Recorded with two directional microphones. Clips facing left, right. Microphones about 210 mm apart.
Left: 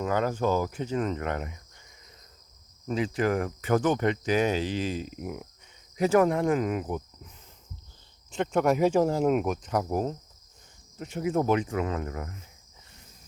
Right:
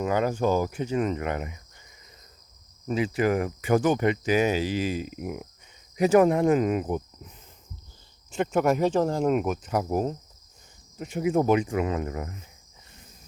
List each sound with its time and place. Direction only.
0.0 s speech: 10° right (ahead or behind)
2.8 s speech: 10° right (ahead or behind)
8.3 s speech: 5° right (ahead or behind)